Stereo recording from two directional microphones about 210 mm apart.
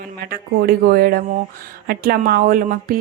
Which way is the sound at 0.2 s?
45° right (ahead or behind).